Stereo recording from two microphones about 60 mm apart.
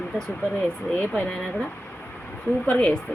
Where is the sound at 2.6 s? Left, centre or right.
Centre.